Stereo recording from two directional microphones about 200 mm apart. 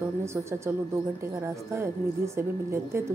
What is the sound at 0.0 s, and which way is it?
A woman's voice, 15° right (ahead or behind).